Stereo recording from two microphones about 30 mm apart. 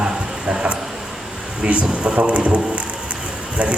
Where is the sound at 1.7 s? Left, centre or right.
Right.